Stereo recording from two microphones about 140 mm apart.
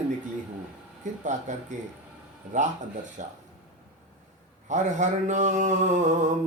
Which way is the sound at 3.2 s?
65° right (ahead or behind).